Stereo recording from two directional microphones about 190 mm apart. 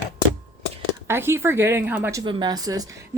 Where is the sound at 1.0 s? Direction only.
15° right (ahead or behind).